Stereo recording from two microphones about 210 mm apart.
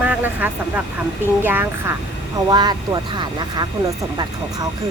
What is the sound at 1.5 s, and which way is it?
Speech, 10° right (ahead or behind).